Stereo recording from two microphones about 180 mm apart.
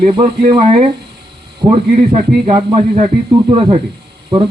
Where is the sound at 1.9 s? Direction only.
35° right (ahead or behind).